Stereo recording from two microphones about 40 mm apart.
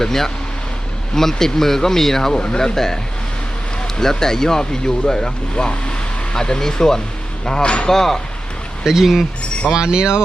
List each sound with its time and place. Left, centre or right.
0.0 s speech: centre
4.0 s speech: centre
7.9 s speech: centre
8.8 s speech: centre
9.7 s speech: right